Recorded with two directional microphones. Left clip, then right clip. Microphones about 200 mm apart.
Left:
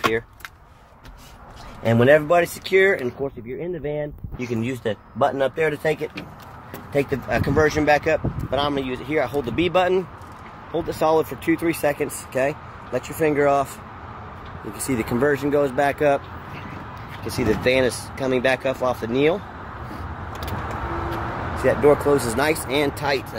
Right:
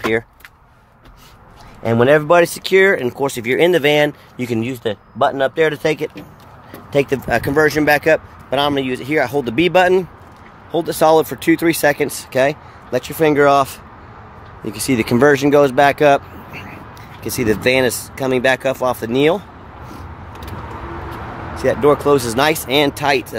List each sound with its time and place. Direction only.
1.8 s speech: 30° right (ahead or behind)
14.7 s speech: 45° right (ahead or behind)
17.2 s speech: 40° right (ahead or behind)
21.6 s speech: 40° right (ahead or behind)